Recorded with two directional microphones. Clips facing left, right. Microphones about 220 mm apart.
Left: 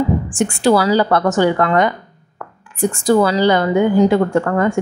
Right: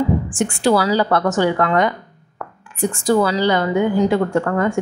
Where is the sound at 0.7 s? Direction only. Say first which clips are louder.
Left 3 dB; 50° left (ahead or behind).